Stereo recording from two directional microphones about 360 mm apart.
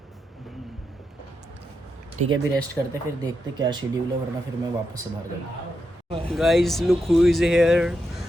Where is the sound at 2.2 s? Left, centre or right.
Centre.